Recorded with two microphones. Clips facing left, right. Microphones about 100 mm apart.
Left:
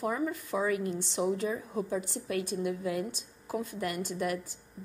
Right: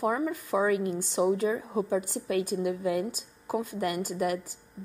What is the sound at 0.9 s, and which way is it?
Speech, 45° right (ahead or behind).